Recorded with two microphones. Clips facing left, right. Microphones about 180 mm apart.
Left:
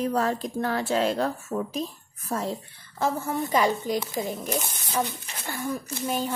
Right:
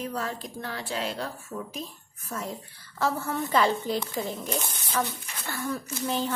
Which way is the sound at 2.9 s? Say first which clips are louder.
Left 2 dB; 15° left (ahead or behind).